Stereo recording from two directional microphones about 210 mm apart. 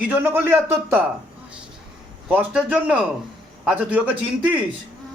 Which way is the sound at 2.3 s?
5° right (ahead or behind).